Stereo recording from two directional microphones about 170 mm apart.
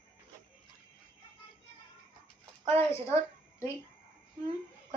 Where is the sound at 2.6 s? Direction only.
15° left (ahead or behind).